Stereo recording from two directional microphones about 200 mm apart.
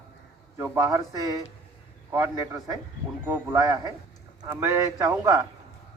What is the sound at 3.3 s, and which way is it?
A man's voice, 15° right (ahead or behind).